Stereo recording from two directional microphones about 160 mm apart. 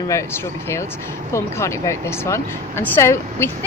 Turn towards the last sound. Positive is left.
turn(degrees=15)  # may be behind; listen again after turning